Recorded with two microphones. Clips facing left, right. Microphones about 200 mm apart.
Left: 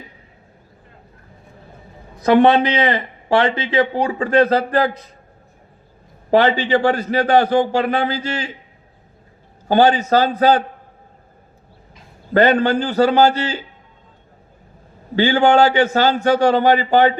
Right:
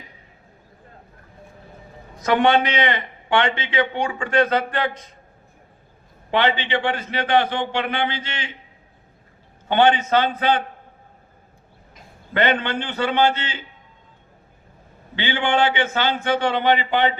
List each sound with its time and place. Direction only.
2.2 s a man's voice: 35° left (ahead or behind)
6.3 s a man's voice: 40° left (ahead or behind)
9.6 s a man's voice: 35° left (ahead or behind)
12.3 s a man's voice: 40° left (ahead or behind)
15.1 s a man's voice: 40° left (ahead or behind)